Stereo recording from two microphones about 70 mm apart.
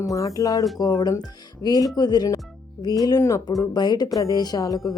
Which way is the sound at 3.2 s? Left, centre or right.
Left.